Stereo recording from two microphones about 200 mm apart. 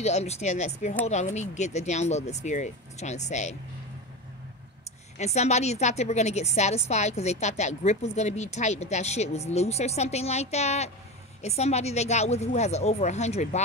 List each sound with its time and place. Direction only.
0.0 s a woman's voice: 35° left (ahead or behind)
5.1 s a woman's voice: 35° left (ahead or behind)